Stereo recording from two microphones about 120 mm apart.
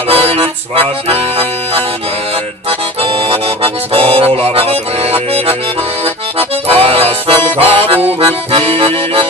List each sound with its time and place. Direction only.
0.1 s accordion: 55° right (ahead or behind)
6.7 s accordion: 55° right (ahead or behind)